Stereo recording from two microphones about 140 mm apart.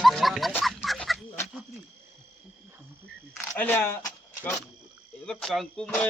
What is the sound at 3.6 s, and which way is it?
Speech, 15° left (ahead or behind).